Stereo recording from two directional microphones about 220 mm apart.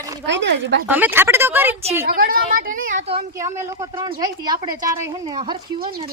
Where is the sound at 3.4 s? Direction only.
10° right (ahead or behind).